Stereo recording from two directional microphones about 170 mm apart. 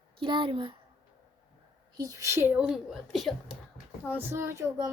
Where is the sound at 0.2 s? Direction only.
30° right (ahead or behind).